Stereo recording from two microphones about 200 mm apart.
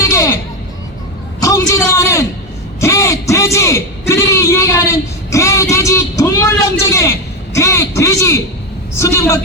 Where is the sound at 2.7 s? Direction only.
15° left (ahead or behind).